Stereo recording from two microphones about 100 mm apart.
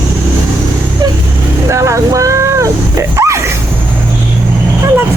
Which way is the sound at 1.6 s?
30° right (ahead or behind).